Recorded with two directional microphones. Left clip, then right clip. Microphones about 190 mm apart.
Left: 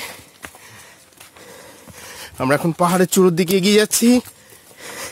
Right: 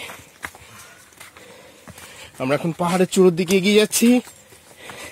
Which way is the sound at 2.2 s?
40° left (ahead or behind).